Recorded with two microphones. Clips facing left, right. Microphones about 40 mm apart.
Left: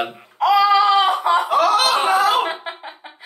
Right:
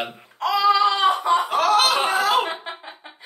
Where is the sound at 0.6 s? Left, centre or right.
Left.